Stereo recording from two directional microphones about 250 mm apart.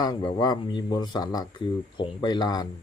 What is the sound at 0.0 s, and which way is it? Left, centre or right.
Speech, centre.